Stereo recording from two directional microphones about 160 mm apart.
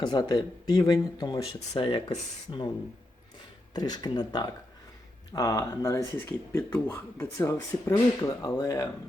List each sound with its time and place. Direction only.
0.0 s speech: 25° left (ahead or behind)
3.8 s speech: 25° left (ahead or behind)
6.5 s speech: 10° left (ahead or behind)